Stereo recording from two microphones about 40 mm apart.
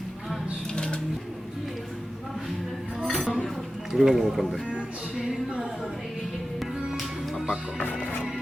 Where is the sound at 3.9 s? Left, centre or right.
Centre.